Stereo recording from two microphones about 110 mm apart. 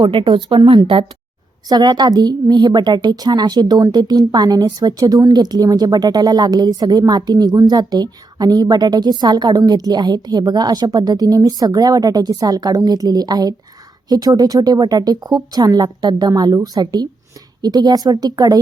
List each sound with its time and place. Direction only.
0.0 s a woman's voice: 50° right (ahead or behind)